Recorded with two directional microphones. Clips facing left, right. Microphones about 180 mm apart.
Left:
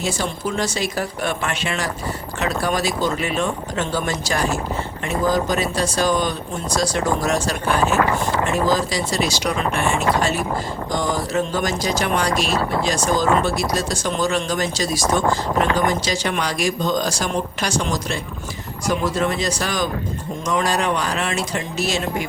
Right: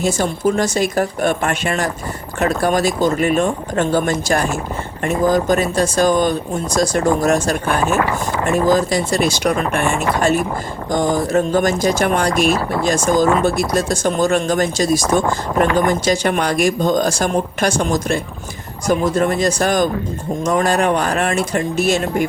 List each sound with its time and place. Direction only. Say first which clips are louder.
0.0 s speech: right 7 dB; 45° right (ahead or behind)